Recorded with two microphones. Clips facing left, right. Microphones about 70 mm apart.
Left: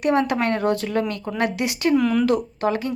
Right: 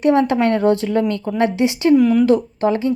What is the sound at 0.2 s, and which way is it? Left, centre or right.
A woman's voice, right.